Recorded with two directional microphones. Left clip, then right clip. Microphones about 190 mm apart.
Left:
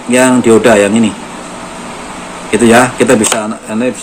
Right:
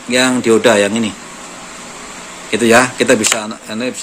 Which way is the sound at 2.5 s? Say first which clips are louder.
Left 3 dB; 45° right (ahead or behind).